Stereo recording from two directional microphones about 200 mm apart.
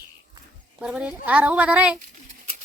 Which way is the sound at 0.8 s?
5° right (ahead or behind).